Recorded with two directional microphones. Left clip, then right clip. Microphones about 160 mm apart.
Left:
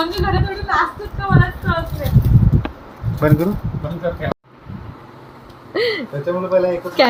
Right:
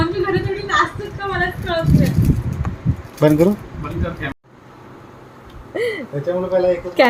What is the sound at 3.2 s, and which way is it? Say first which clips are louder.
Speech: right 3 dB; 35° right (ahead or behind).